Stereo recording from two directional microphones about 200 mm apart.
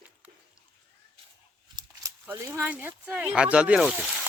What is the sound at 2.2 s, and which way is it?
Speech, 10° right (ahead or behind).